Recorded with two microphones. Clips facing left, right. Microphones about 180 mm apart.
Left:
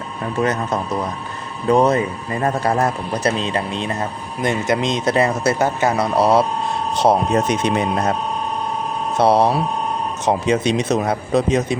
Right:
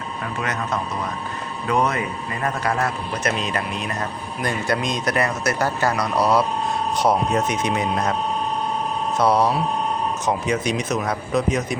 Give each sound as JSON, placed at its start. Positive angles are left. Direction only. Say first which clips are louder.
{"t": 0.3, "sound": "speech", "louder": "left 7 dB", "side_deg": 30}
{"t": 9.1, "sound": "speech", "louder": "left 4 dB", "side_deg": 30}